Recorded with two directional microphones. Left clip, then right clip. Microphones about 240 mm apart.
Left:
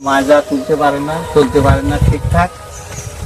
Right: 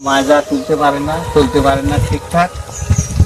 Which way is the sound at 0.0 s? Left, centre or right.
Centre.